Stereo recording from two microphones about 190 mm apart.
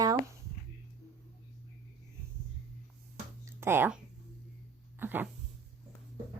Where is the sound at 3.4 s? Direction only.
10° right (ahead or behind).